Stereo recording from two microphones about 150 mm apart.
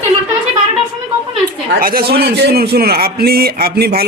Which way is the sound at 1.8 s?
85° right.